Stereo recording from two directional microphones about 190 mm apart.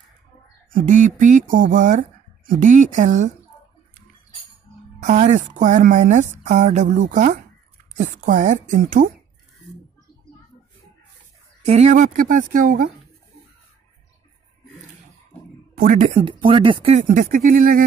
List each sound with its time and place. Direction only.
0.7 s speech: 45° right (ahead or behind)
5.0 s a woman's voice: 40° right (ahead or behind)
11.6 s speech: 35° right (ahead or behind)
15.7 s a woman's voice: 45° right (ahead or behind); by 17.0 s 30° right (ahead or behind)
17.1 s speech: 45° right (ahead or behind)